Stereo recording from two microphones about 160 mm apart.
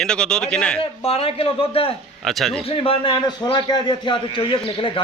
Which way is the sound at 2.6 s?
35° left (ahead or behind).